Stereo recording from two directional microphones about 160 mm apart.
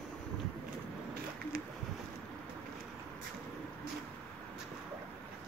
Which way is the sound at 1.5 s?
70° right (ahead or behind).